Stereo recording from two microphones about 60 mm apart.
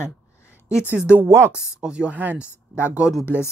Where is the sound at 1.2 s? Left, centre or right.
Right.